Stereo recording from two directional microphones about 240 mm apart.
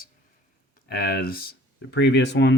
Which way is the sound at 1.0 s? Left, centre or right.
Left.